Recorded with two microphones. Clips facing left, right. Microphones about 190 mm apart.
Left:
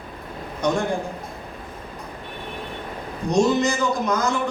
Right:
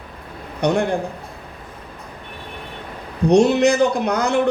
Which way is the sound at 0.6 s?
65° right (ahead or behind).